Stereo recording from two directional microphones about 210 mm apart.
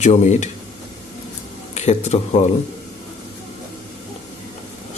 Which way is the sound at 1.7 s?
35° left (ahead or behind).